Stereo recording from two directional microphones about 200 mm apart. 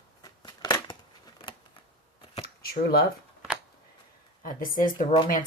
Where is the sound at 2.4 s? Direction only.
50° left (ahead or behind).